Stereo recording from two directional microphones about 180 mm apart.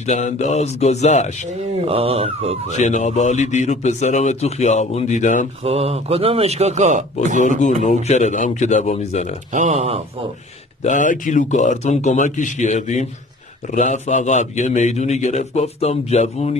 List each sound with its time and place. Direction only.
0.0 s speech: 40° left (ahead or behind)
1.9 s a man's voice: 30° right (ahead or behind)
2.8 s speech: 40° left (ahead or behind)
5.6 s a man's voice: 35° right (ahead or behind)
7.3 s speech: 45° left (ahead or behind)
9.5 s a man's voice: 40° right (ahead or behind)
10.8 s speech: 45° left (ahead or behind)